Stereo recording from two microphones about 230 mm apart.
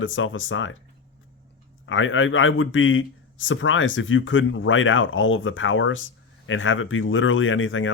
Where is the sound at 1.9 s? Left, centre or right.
Left.